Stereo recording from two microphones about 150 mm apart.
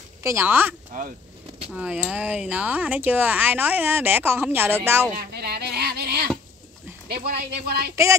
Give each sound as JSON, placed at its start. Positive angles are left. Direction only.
{"t": 0.2, "sound": "speech", "side_deg": -15}
{"t": 5.3, "sound": "a sound", "side_deg": -90}
{"t": 7.1, "sound": "speech", "side_deg": -90}
{"t": 7.9, "sound": "speech", "side_deg": -20}